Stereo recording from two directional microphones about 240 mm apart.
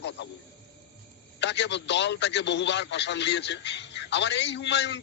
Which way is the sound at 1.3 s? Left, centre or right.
Left.